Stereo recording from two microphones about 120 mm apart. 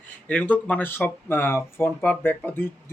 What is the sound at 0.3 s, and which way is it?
Speech, 10° left (ahead or behind).